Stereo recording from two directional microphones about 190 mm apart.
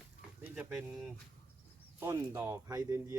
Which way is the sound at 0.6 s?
5° right (ahead or behind).